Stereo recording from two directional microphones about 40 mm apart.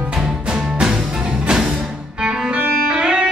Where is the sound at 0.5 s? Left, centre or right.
Centre.